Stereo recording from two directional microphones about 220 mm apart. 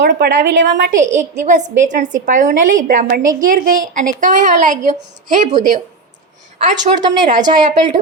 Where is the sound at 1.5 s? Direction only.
35° right (ahead or behind).